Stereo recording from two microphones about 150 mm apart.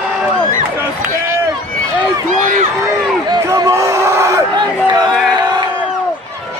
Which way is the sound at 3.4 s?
20° right (ahead or behind).